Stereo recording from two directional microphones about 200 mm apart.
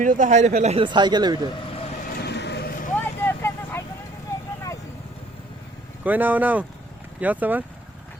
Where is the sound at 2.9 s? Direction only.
10° left (ahead or behind).